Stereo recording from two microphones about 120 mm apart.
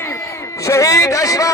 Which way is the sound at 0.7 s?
25° left (ahead or behind).